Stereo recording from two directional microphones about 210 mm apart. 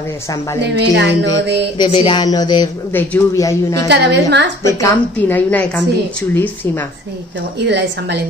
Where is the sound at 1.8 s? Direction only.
25° left (ahead or behind).